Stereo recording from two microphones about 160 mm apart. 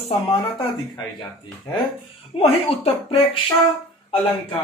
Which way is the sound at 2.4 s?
35° left (ahead or behind).